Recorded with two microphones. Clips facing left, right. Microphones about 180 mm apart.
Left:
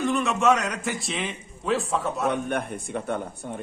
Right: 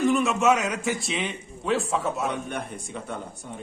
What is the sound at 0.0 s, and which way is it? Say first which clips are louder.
A man's voice: right 1 dB; centre (ahead or behind).